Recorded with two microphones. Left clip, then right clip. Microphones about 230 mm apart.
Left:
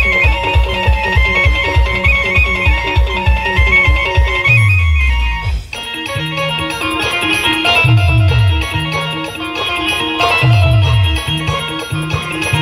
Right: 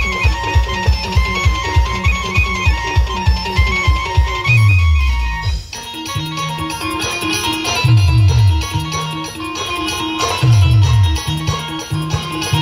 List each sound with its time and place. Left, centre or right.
0.0 s music: right
7.0 s music: right
9.7 s music: right